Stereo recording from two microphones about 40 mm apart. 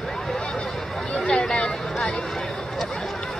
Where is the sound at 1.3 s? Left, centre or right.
Left.